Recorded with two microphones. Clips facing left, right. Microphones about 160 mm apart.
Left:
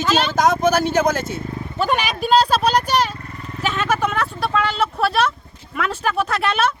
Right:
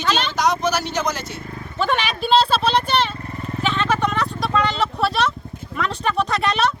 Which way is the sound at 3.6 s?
5° left (ahead or behind).